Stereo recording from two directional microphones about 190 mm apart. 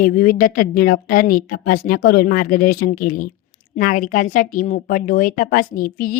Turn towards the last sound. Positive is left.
turn(degrees=50)  # may be behind; listen again after turning